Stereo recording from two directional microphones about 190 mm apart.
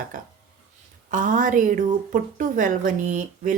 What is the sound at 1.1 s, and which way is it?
A woman's voice, 45° right (ahead or behind).